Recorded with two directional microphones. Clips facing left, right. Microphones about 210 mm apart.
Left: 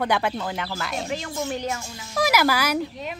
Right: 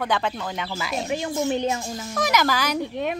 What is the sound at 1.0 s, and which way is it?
Speech, 20° right (ahead or behind).